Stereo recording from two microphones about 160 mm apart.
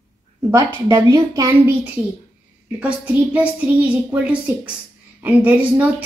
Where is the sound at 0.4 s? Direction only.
20° right (ahead or behind).